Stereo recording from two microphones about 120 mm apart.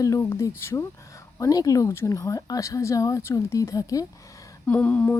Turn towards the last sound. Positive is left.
turn(degrees=15)  # may be behind; listen again after turning